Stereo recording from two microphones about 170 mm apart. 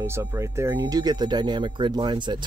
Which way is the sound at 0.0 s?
20° right (ahead or behind).